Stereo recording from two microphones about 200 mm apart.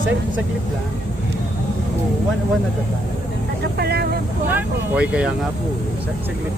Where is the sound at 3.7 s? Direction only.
55° right (ahead or behind).